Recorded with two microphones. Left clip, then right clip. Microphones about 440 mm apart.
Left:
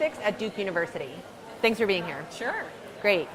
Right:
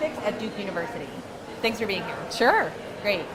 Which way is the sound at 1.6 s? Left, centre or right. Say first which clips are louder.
Left 2 dB; left.